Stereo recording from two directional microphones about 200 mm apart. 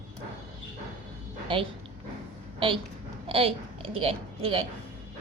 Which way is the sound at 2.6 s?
25° right (ahead or behind).